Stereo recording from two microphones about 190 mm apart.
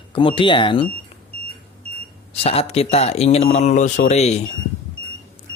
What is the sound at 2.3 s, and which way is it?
Speech, 35° left (ahead or behind).